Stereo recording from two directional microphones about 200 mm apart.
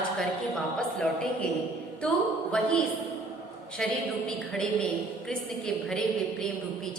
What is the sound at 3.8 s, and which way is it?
Speech, 5° left (ahead or behind).